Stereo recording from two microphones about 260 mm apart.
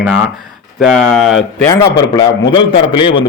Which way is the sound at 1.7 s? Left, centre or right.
Centre.